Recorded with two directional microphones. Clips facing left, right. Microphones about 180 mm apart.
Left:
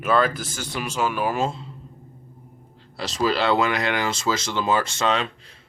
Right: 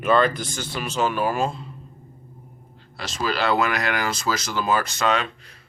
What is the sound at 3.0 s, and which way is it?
Speech, 30° left (ahead or behind).